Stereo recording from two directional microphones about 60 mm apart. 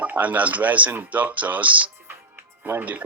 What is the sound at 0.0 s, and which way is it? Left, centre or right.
Speech, right.